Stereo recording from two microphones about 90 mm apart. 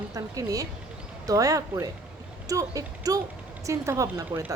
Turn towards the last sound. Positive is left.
turn(degrees=-35)  # may be behind; listen again after turning